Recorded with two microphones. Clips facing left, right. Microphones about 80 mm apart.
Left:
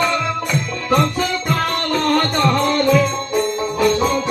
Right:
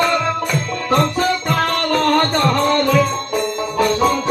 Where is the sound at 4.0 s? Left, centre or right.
Right.